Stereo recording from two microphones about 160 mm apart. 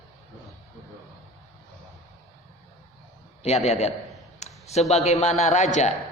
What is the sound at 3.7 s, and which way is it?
Speech, 40° left (ahead or behind).